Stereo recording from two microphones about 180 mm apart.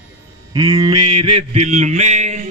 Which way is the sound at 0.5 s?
20° right (ahead or behind).